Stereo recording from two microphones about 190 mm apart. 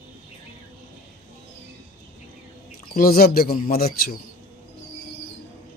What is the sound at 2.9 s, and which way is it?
Speech, 50° left (ahead or behind).